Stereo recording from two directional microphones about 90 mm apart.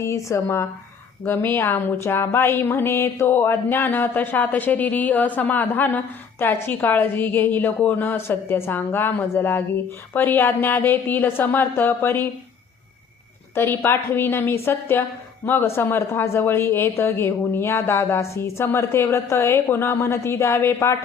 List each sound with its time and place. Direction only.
0.0 s a woman's voice: 35° left (ahead or behind)
13.6 s a woman's voice: 25° left (ahead or behind)